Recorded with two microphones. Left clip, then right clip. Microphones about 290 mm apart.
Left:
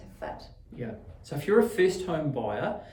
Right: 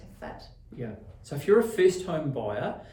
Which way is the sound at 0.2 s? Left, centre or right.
Centre.